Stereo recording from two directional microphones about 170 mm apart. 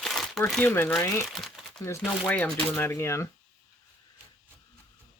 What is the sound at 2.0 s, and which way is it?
Speech, 10° left (ahead or behind).